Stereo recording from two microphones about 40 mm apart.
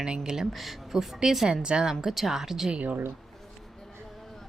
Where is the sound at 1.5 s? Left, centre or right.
Right.